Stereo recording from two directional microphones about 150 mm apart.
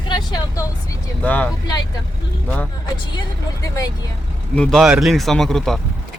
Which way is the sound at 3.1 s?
25° left (ahead or behind).